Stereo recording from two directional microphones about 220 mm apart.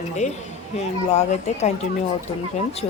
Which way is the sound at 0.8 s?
30° left (ahead or behind).